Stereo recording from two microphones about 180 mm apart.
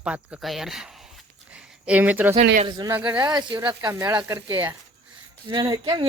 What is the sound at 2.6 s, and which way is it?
Speech, 25° right (ahead or behind).